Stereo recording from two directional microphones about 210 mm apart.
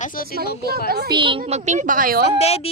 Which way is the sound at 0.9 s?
45° right (ahead or behind).